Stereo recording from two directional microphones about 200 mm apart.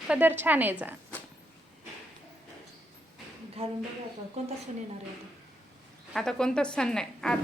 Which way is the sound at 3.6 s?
30° right (ahead or behind).